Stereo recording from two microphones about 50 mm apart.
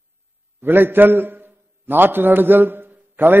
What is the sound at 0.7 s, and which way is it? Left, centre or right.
A man's voice, right.